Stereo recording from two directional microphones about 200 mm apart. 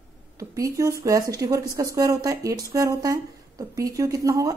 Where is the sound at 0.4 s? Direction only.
15° right (ahead or behind).